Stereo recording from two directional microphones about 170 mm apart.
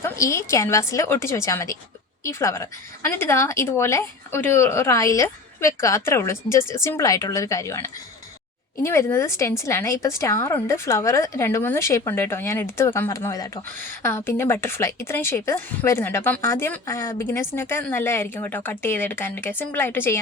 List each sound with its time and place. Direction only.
0.0 s a woman's voice: 15° left (ahead or behind)